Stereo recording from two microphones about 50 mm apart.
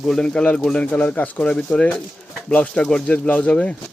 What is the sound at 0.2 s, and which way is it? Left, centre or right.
Speech, centre.